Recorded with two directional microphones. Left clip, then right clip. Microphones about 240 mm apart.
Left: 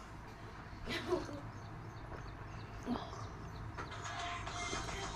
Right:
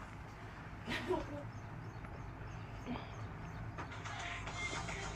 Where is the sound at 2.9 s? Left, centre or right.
Left.